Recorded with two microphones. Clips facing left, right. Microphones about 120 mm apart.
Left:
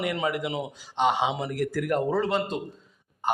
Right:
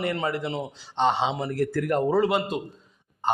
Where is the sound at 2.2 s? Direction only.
5° right (ahead or behind).